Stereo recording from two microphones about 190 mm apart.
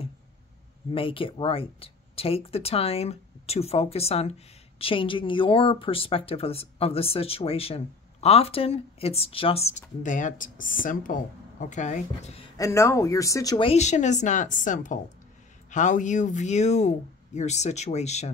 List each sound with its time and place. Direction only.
0.9 s speech: 30° left (ahead or behind)
12.5 s speech: 15° left (ahead or behind)
13.7 s speech: 35° left (ahead or behind)